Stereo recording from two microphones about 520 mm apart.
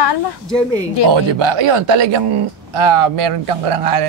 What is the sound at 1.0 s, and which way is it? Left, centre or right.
A man's voice, right.